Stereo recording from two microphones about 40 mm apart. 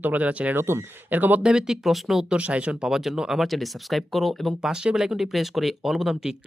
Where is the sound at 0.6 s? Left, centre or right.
Right.